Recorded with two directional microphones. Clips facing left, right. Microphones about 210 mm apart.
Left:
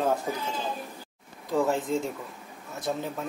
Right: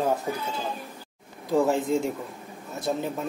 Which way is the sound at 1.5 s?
10° right (ahead or behind).